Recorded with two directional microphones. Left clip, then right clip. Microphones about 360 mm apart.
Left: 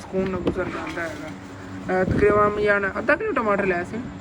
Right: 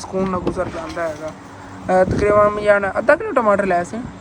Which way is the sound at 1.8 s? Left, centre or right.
Centre.